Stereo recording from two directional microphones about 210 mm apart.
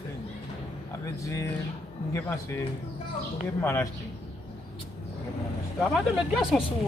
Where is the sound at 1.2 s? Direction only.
10° left (ahead or behind).